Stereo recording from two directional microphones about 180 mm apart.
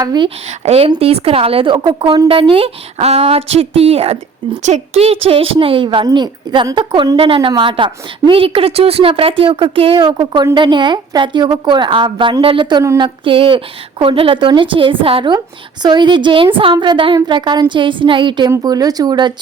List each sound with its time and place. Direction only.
0.0 s a woman's voice: 20° right (ahead or behind)
0.6 s a woman's voice: 35° right (ahead or behind)